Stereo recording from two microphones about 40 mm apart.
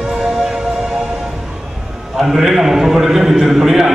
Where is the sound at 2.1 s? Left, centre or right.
Centre.